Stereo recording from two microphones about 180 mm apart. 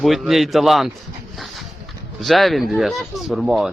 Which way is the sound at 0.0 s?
Centre (ahead or behind).